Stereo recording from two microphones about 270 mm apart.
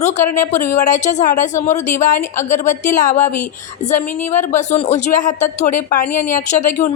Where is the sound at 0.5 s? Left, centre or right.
Centre.